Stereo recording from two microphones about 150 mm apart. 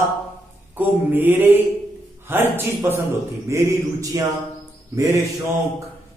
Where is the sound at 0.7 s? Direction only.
10° right (ahead or behind).